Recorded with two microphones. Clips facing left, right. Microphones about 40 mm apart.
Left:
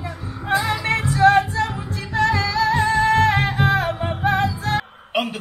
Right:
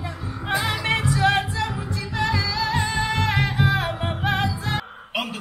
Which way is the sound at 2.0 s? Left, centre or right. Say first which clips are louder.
Left 5 dB; left.